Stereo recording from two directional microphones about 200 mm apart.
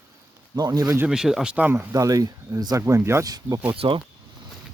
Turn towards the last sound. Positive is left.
turn(degrees=-25)  # may be behind; listen again after turning